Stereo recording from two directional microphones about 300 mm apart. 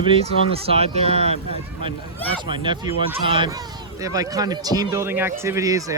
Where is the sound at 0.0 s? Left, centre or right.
Centre.